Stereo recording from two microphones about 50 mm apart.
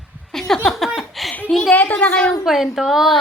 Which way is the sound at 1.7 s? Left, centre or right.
Left.